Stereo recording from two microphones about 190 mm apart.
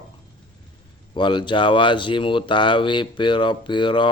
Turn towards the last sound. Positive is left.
turn(degrees=25)  # may be behind; listen again after turning